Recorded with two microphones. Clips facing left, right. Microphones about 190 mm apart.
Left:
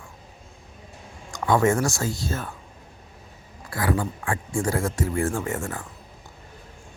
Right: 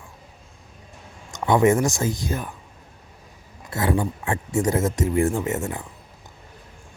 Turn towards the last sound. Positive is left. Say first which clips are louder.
# right 3 dB
turn(degrees=-20)  # may be behind; listen again after turning